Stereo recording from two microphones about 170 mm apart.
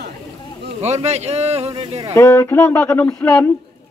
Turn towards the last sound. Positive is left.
turn(degrees=15)  # may be behind; listen again after turning